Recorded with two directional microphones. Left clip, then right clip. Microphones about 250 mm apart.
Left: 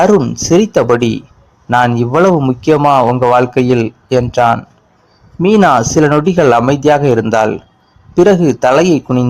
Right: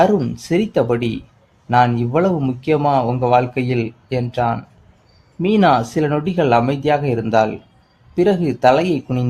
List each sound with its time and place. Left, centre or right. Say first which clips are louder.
0.0 s a man's voice: left 6 dB; centre